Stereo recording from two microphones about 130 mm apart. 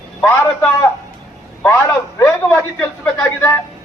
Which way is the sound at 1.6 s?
25° left (ahead or behind).